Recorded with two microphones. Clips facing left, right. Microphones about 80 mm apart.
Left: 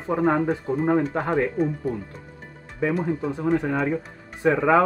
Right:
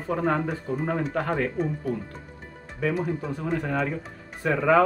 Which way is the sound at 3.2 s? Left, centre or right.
Centre.